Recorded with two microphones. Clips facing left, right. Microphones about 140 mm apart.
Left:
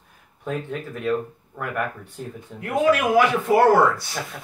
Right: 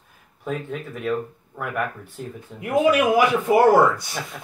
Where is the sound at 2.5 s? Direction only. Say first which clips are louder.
Right 2 dB; 15° right (ahead or behind).